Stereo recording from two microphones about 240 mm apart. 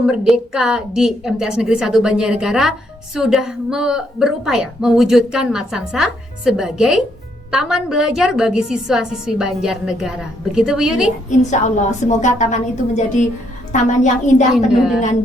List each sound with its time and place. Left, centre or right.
0.0 s a woman's voice: centre
11.3 s a woman's voice: left
14.5 s a woman's voice: centre